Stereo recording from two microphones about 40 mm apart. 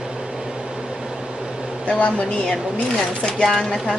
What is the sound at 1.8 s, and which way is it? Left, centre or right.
Speech, left.